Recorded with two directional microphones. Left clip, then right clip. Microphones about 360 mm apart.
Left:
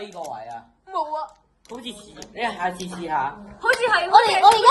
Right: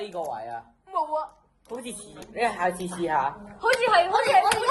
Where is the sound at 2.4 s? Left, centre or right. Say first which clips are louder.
Even; right.